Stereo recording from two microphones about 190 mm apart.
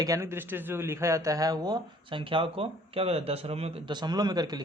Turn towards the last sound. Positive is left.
turn(degrees=-20)  # may be behind; listen again after turning